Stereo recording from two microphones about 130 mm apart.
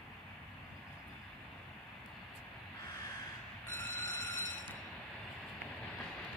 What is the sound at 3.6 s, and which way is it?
Vehicle, 20° left (ahead or behind).